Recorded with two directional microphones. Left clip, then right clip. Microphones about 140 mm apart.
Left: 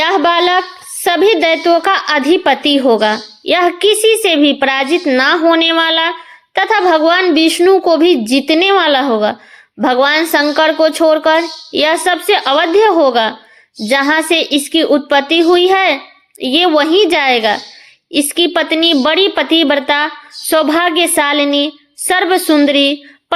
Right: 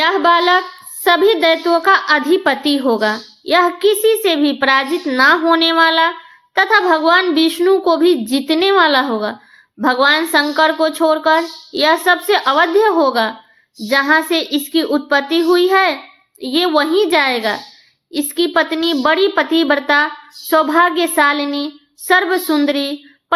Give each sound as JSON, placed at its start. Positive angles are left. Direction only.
{"t": 0.0, "sound": "a woman's voice", "side_deg": 35}